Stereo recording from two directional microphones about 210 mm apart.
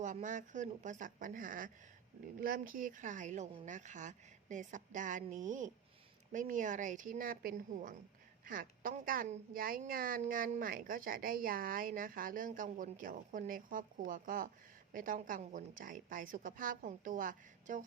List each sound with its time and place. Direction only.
0.0 s a woman's voice: 35° right (ahead or behind)